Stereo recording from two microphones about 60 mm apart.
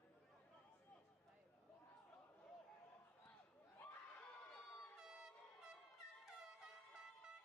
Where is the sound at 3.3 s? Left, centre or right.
Left.